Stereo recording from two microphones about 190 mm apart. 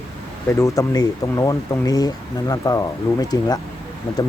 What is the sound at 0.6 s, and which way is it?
Speech, 15° left (ahead or behind).